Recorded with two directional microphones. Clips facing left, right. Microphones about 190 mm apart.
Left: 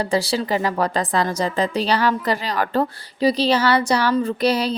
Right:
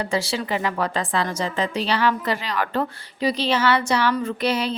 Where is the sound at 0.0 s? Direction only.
35° left (ahead or behind).